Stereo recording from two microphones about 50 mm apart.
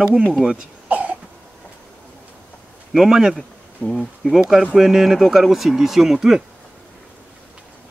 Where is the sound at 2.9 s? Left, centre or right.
Centre.